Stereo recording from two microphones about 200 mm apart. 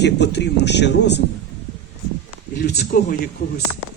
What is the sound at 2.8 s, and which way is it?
Speech, 50° left (ahead or behind).